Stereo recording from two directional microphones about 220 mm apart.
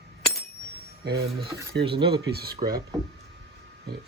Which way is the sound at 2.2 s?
45° right (ahead or behind).